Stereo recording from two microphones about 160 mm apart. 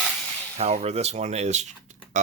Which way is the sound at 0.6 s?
40° right (ahead or behind).